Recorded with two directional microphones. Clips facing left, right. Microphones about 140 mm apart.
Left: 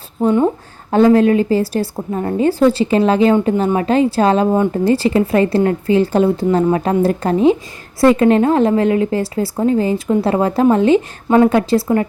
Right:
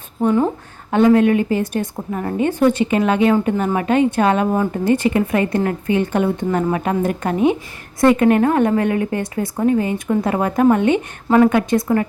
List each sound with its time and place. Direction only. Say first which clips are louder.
0.9 s a woman's voice: left 2 dB; 35° left (ahead or behind)